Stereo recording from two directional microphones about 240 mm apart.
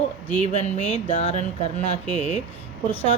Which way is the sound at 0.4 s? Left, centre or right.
Left.